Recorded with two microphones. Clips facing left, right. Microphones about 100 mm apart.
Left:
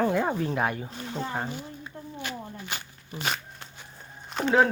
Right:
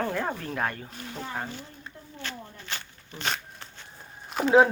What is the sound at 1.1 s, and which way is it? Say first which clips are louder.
Speech: left 3 dB; 25° left (ahead or behind).